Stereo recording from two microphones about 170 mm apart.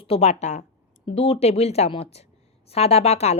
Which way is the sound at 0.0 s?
35° left (ahead or behind).